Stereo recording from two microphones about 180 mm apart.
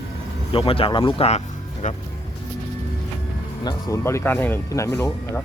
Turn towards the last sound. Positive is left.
turn(degrees=20)  # may be behind; listen again after turning